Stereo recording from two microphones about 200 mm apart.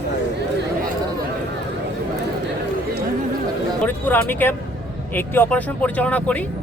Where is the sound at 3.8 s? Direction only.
10° left (ahead or behind).